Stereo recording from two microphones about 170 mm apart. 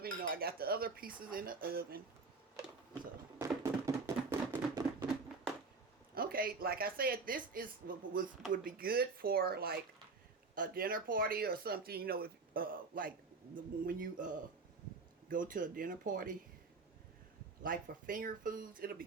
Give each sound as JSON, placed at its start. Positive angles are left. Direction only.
{"t": 0.0, "sound": "speech", "side_deg": -60}
{"t": 3.4, "sound": "a sound", "side_deg": -15}
{"t": 6.1, "sound": "speech", "side_deg": -60}
{"t": 10.5, "sound": "speech", "side_deg": -55}
{"t": 17.6, "sound": "speech", "side_deg": -55}